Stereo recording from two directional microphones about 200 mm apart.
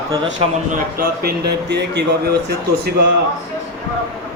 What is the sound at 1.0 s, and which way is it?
Speech, 50° right (ahead or behind).